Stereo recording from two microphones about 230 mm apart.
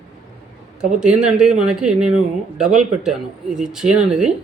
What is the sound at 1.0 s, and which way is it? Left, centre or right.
Speech, centre.